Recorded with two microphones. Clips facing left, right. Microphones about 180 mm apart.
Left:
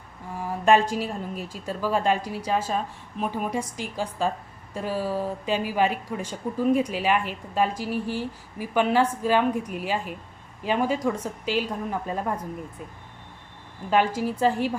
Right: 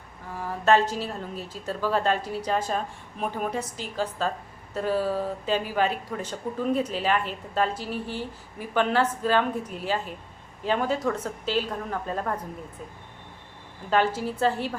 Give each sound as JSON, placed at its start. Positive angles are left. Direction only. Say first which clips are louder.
{"t": 0.6, "sound": "speech", "louder": "left 1 dB", "side_deg": 15}
{"t": 13.9, "sound": "speech", "louder": "left 1 dB", "side_deg": 10}